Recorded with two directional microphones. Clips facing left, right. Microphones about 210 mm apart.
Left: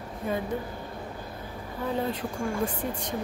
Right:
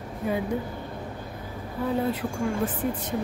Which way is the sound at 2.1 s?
5° right (ahead or behind).